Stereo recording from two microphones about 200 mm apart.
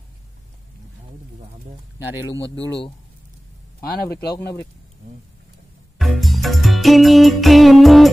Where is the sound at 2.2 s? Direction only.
60° left (ahead or behind).